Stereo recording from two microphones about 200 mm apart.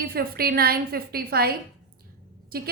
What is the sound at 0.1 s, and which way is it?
A woman's voice, 50° right (ahead or behind).